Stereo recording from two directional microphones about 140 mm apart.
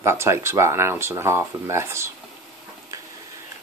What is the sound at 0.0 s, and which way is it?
Speech, 20° right (ahead or behind).